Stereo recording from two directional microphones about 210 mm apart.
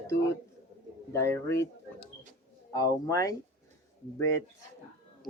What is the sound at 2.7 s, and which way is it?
Speech, 15° left (ahead or behind).